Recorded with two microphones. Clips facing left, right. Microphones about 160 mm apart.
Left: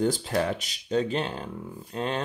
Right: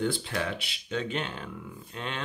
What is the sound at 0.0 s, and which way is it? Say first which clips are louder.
Speech: left 5 dB; 40° left (ahead or behind).